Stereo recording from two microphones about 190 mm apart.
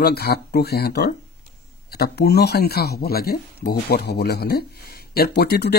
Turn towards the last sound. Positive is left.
turn(degrees=55)  # may be behind; listen again after turning